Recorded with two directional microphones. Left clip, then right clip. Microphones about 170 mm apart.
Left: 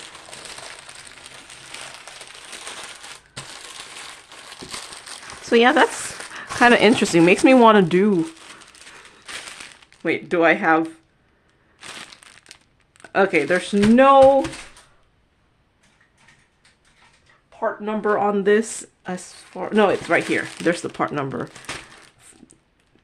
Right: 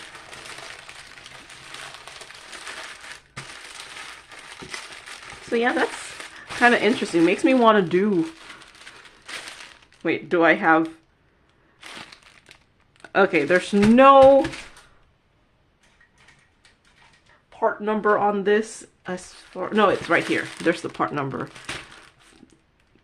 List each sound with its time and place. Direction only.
5.5 s speech: 55° left (ahead or behind); by 8.2 s 25° left (ahead or behind)
10.0 s speech: 5° left (ahead or behind)
13.0 s speech: centre (ahead or behind)
18.0 s speech: 5° left (ahead or behind)